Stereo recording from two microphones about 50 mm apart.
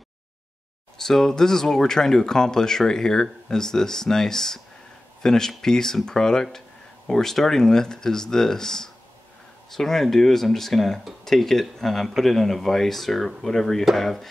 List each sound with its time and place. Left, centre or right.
0.9 s speech: centre